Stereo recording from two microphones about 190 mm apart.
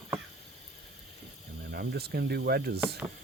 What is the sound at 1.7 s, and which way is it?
Speech, 55° right (ahead or behind).